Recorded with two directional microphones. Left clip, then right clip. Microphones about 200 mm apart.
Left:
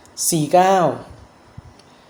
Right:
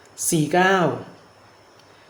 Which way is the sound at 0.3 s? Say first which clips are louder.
Left 4 dB; 15° left (ahead or behind).